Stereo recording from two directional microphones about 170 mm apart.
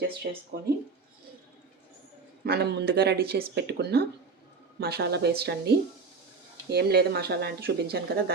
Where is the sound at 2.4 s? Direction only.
75° right (ahead or behind).